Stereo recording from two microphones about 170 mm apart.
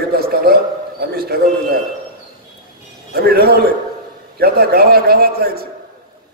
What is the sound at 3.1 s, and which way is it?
A man's voice, 65° right (ahead or behind).